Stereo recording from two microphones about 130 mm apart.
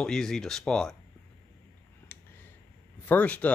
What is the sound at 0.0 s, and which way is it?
Speech, 5° left (ahead or behind).